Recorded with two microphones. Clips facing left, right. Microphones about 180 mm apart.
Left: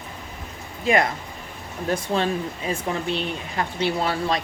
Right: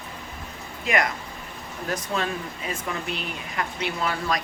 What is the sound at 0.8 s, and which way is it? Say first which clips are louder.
Speech: left 4 dB; 30° left (ahead or behind).